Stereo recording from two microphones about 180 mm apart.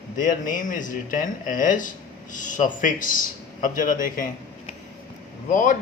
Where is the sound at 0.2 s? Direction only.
45° left (ahead or behind).